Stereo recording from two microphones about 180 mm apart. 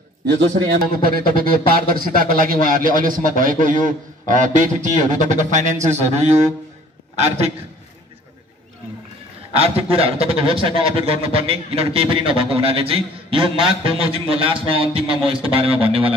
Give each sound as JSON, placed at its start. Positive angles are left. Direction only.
{"t": 0.3, "sound": "a man's voice", "side_deg": -65}
{"t": 7.2, "sound": "a man's voice", "side_deg": -35}
{"t": 9.5, "sound": "a man's voice", "side_deg": -35}